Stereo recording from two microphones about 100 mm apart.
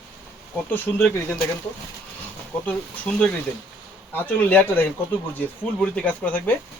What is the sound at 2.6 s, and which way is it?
Speech, 15° left (ahead or behind).